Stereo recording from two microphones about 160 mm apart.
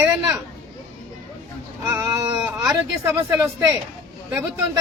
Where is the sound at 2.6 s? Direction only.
10° right (ahead or behind).